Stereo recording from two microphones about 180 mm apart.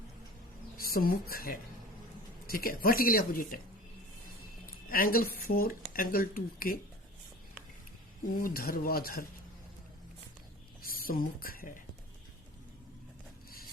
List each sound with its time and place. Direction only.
0.8 s speech: 55° left (ahead or behind)
4.6 s speech: 55° left (ahead or behind)
8.4 s speech: 55° left (ahead or behind)
11.0 s speech: 55° left (ahead or behind)